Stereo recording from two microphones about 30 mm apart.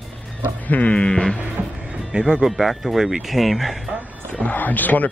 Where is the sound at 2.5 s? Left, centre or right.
Centre.